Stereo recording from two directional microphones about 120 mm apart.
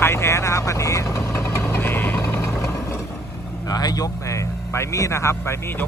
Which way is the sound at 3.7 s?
30° left (ahead or behind).